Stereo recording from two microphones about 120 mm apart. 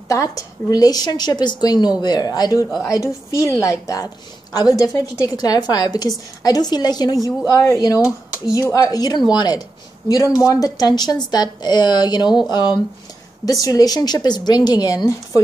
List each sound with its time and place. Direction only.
0.1 s a woman's voice: 25° left (ahead or behind)
13.5 s a woman's voice: 30° left (ahead or behind)